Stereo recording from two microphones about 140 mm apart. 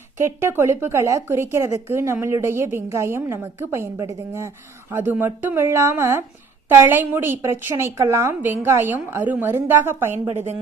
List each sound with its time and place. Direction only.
0.2 s a woman's voice: 15° right (ahead or behind)